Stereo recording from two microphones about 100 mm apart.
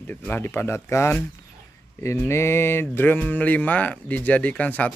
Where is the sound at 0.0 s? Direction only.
20° left (ahead or behind).